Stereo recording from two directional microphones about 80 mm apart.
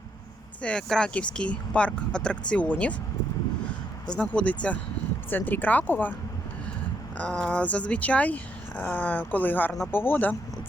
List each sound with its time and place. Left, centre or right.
0.6 s speech: centre
4.1 s speech: centre
7.2 s speech: centre